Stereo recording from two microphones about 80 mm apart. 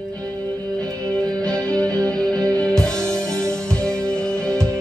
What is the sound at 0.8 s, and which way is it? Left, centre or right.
Music, right.